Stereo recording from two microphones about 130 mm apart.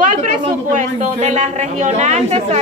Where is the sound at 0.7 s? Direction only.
60° right (ahead or behind).